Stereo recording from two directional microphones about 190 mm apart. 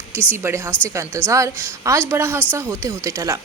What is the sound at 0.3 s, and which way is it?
A woman's voice, 10° right (ahead or behind).